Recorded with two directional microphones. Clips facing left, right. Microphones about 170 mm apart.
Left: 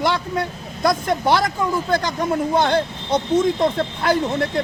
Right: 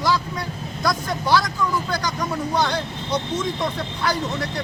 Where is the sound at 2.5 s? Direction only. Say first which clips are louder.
Left 5 dB; 50° left (ahead or behind).